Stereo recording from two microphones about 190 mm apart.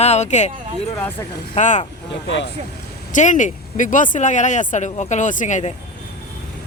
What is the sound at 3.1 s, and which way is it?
Speech, 40° left (ahead or behind).